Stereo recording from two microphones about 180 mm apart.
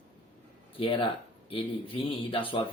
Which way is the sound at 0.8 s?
30° left (ahead or behind).